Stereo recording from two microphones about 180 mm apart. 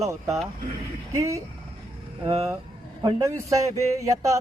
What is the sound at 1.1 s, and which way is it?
Speech, 15° right (ahead or behind).